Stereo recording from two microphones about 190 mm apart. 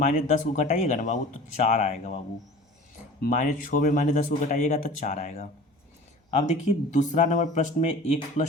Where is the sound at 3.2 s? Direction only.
45° left (ahead or behind).